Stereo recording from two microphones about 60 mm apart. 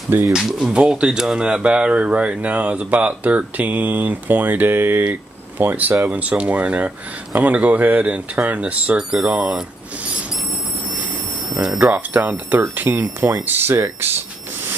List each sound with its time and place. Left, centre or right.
0.4 s speech: centre
8.9 s speech: centre
11.5 s speech: right